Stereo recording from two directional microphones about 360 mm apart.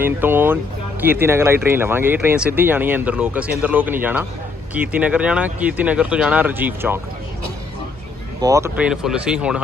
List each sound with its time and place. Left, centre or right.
0.0 s speech: centre
8.4 s speech: centre